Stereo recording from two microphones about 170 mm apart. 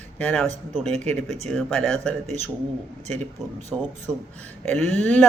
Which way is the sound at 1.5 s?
5° left (ahead or behind).